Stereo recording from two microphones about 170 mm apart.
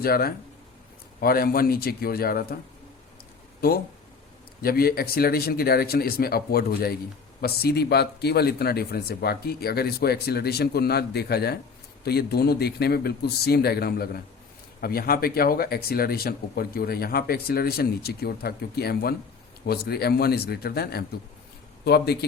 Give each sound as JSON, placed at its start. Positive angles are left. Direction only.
{"t": 0.0, "sound": "speech", "side_deg": 65}
{"t": 3.6, "sound": "speech", "side_deg": 60}